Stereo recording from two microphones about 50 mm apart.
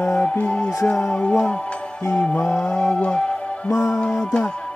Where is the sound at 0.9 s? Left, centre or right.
Centre.